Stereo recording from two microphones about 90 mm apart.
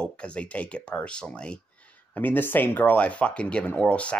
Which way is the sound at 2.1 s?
20° left (ahead or behind).